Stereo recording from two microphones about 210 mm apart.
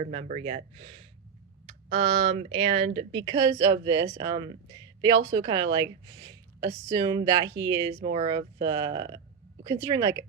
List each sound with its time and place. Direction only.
0.0 s a woman's voice: 30° right (ahead or behind); by 10.2 s 15° right (ahead or behind)